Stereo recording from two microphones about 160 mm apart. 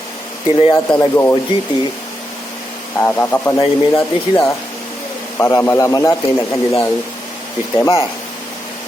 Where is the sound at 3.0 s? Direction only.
10° left (ahead or behind).